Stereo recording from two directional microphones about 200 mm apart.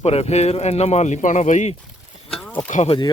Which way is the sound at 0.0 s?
30° left (ahead or behind).